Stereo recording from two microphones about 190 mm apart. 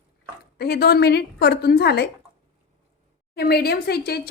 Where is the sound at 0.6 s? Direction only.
55° left (ahead or behind).